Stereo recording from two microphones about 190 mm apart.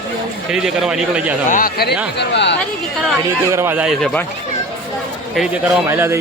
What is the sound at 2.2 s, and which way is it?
Speech, 65° left (ahead or behind).